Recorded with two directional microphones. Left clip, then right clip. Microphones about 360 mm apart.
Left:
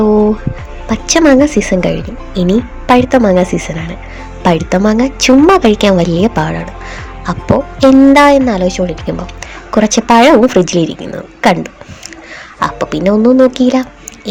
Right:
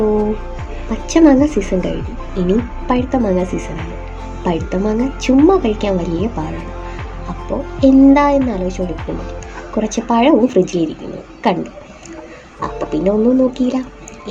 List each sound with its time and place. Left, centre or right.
0.9 s speech: left
7.8 s speech: left